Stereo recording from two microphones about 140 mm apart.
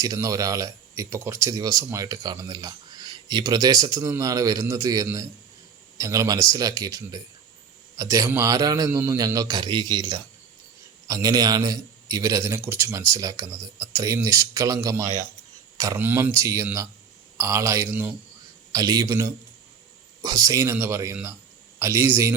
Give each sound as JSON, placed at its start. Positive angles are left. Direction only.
{"t": 0.0, "sound": "speech", "side_deg": -25}